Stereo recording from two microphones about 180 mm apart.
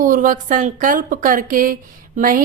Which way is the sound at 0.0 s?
45° right (ahead or behind).